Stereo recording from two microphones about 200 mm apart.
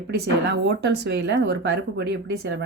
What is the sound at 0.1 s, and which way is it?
Speech, 60° right (ahead or behind).